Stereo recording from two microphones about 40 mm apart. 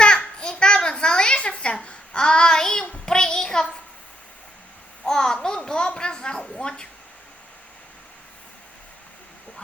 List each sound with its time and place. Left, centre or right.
0.0 s babbling: left
5.0 s a child's voice: centre